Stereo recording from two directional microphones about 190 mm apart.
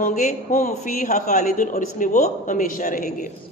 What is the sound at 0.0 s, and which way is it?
A woman's voice, 40° left (ahead or behind).